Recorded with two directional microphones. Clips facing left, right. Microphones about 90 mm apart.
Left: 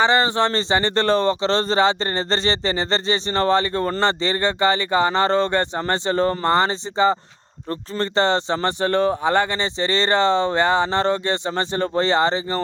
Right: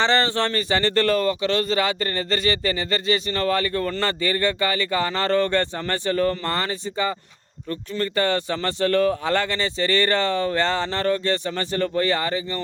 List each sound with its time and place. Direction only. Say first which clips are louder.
0.0 s speech: left 3 dB; 15° left (ahead or behind)